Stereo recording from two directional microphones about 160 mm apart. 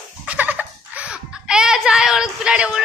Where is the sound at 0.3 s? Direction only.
10° right (ahead or behind).